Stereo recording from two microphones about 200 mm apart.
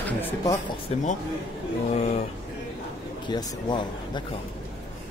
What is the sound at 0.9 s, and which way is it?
Speech, 30° left (ahead or behind).